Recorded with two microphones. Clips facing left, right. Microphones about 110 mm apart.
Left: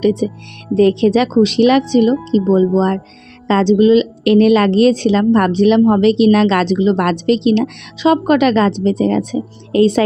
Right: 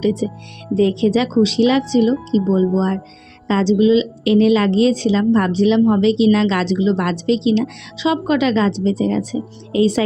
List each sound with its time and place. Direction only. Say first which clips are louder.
0.0 s a woman's voice: left 4 dB; 60° left (ahead or behind)